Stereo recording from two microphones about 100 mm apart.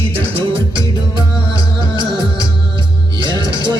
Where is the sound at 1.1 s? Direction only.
50° right (ahead or behind).